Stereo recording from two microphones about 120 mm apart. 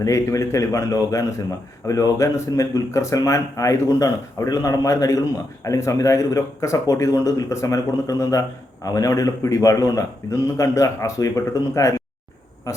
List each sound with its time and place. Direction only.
0.0 s a man's voice: 25° left (ahead or behind)